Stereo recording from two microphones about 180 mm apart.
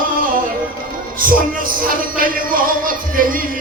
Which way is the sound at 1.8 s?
50° right (ahead or behind).